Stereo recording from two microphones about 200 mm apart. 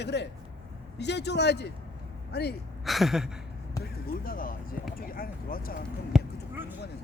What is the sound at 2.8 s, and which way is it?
Speech, centre (ahead or behind).